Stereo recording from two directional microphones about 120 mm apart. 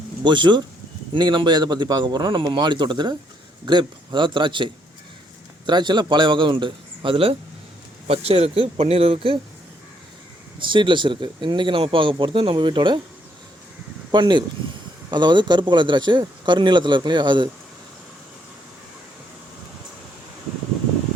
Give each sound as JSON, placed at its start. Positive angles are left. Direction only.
{"t": 0.3, "sound": "a man's voice", "side_deg": -40}
{"t": 10.6, "sound": "speech", "side_deg": -45}
{"t": 14.1, "sound": "a man's voice", "side_deg": -40}